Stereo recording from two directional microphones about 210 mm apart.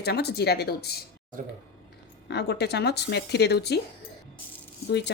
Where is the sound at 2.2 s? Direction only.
55° left (ahead or behind).